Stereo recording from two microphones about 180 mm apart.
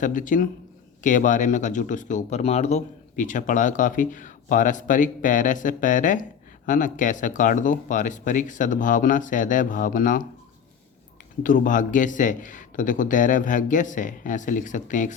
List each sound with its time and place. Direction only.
0.0 s speech: 45° left (ahead or behind)
11.4 s speech: 50° left (ahead or behind)